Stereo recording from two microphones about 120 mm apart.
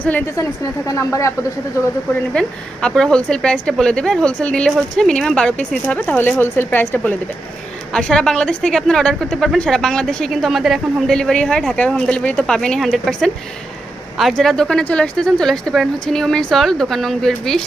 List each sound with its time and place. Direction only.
0.0 s a woman's voice: 15° left (ahead or behind)
0.9 s speech: 25° left (ahead or behind)
2.3 s a woman's voice: 5° left (ahead or behind)